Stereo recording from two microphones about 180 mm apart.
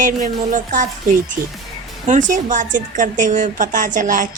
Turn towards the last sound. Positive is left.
turn(degrees=-45)  # may be behind; listen again after turning